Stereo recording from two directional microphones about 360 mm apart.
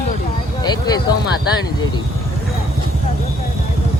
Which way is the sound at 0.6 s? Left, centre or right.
Centre.